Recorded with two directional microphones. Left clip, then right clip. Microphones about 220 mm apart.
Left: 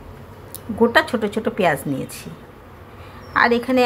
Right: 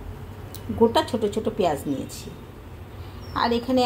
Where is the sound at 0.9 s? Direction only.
5° left (ahead or behind).